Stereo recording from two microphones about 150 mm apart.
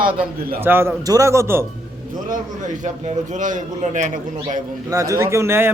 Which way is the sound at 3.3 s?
60° right (ahead or behind).